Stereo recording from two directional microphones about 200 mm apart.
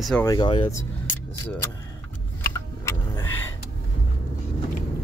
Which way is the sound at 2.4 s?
10° left (ahead or behind).